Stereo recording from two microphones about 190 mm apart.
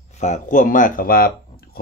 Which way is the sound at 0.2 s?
40° left (ahead or behind).